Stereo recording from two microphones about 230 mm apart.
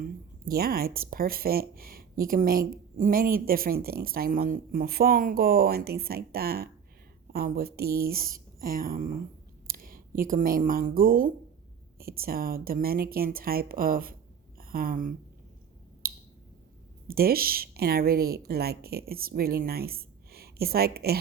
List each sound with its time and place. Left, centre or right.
0.0 s speech: right
16.0 s a sound: right
17.1 s speech: right